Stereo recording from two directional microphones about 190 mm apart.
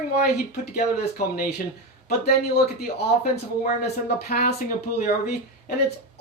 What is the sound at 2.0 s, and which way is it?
Speech, 55° left (ahead or behind).